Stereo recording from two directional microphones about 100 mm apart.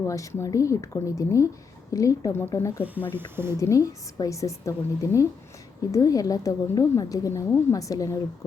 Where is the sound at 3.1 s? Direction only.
20° right (ahead or behind).